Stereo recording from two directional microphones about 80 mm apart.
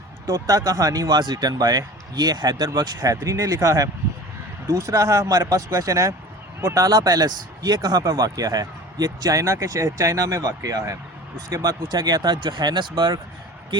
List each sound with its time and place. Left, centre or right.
0.3 s speech: right